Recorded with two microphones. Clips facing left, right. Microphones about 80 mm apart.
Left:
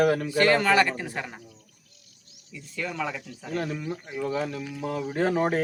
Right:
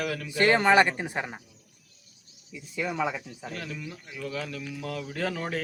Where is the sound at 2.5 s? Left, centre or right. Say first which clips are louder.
Right 2 dB; centre.